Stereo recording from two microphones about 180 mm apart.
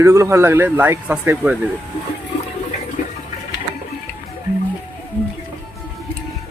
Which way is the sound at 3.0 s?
40° left (ahead or behind).